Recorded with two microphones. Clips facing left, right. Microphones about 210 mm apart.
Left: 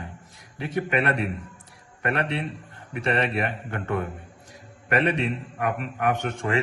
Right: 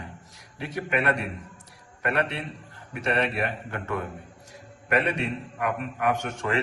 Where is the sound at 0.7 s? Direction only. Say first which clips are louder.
Left 2 dB; 60° left (ahead or behind).